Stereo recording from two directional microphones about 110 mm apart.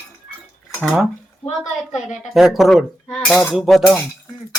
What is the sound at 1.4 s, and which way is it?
Speech, 90° left.